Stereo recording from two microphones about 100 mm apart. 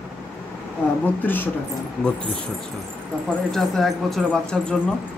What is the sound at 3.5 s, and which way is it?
Speech, 5° left (ahead or behind).